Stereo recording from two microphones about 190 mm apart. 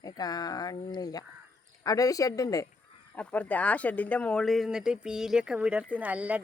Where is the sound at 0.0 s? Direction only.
20° left (ahead or behind).